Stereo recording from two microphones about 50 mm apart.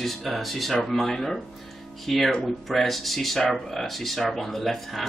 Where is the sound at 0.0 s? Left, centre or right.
Centre.